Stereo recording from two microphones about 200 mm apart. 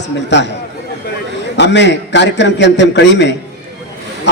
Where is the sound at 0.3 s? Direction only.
60° left (ahead or behind).